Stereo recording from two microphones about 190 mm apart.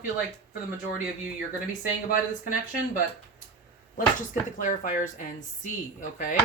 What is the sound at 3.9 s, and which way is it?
Speech, 45° left (ahead or behind).